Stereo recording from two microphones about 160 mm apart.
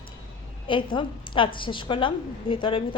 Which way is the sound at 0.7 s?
30° left (ahead or behind).